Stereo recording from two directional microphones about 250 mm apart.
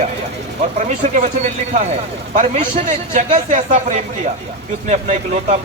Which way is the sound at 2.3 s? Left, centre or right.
Right.